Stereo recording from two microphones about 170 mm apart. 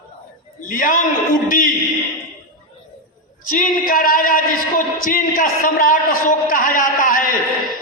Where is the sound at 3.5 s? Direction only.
55° left (ahead or behind).